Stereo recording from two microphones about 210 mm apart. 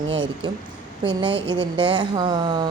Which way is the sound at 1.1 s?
25° right (ahead or behind).